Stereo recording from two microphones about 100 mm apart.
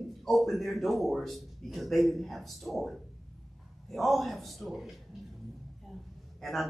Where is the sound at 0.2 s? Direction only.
Centre (ahead or behind).